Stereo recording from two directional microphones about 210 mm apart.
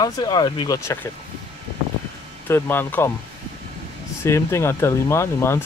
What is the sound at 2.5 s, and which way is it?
Speech, 10° left (ahead or behind).